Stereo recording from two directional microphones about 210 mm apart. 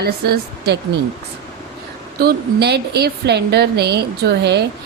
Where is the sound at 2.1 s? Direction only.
50° right (ahead or behind).